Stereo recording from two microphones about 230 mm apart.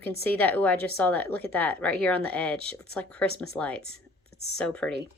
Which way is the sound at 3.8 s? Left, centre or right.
Left.